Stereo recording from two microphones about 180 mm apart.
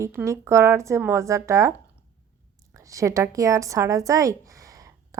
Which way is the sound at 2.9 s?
15° right (ahead or behind).